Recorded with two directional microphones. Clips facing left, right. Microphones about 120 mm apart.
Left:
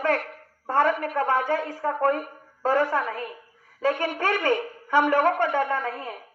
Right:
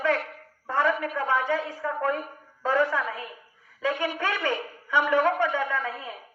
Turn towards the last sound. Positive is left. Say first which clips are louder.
# left 3 dB
turn(degrees=50)  # may be behind; listen again after turning